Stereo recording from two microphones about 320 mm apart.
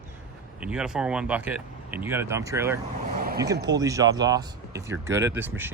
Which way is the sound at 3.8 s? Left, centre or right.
Centre.